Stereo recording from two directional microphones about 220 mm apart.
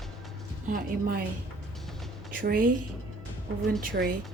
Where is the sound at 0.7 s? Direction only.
40° right (ahead or behind).